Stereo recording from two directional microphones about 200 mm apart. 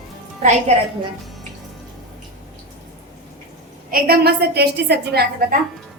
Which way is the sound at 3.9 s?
50° right (ahead or behind).